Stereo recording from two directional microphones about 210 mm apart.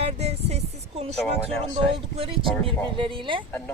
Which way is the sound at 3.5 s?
10° left (ahead or behind).